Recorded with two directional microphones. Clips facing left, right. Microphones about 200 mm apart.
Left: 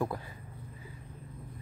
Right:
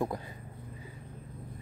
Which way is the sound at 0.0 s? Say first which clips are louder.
Right 1 dB; 20° right (ahead or behind).